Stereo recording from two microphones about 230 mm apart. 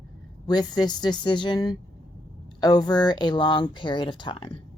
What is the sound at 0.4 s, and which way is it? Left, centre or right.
A woman's voice, centre.